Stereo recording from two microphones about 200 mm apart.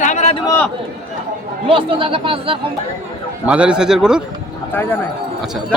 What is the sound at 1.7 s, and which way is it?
Speech, 25° right (ahead or behind).